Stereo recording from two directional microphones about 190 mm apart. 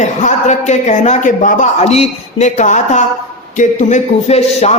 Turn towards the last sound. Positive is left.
turn(degrees=35)  # may be behind; listen again after turning